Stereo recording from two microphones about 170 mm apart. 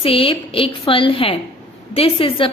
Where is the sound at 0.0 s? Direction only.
30° left (ahead or behind).